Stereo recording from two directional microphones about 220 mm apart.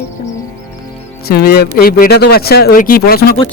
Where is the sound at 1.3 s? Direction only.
45° left (ahead or behind).